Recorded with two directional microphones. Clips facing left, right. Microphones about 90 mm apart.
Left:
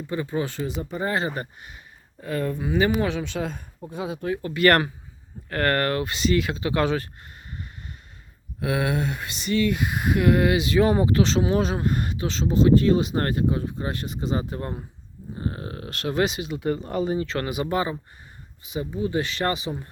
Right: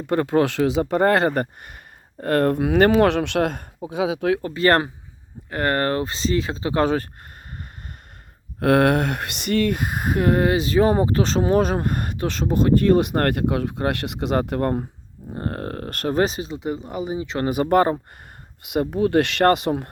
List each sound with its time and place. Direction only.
0.1 s speech: 65° right (ahead or behind)
2.2 s speech: 70° right (ahead or behind)
3.8 s speech: 90° right
4.4 s speech: 30° right (ahead or behind)
8.6 s speech: 60° right (ahead or behind); by 16.6 s 35° right (ahead or behind)
16.6 s speech: 15° right (ahead or behind)
17.4 s speech: 45° right (ahead or behind)
18.6 s speech: 70° right (ahead or behind)